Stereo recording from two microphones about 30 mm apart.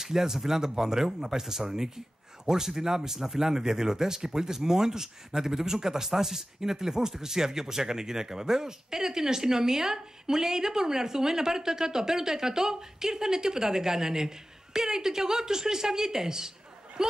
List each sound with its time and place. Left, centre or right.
0.0 s speech: centre